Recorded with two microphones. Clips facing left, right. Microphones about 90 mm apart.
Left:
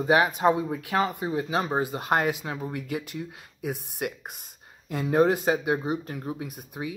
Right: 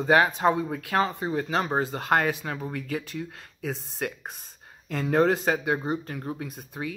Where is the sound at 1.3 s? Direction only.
20° left (ahead or behind).